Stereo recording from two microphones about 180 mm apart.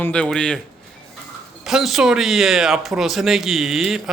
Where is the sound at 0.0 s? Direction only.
5° left (ahead or behind).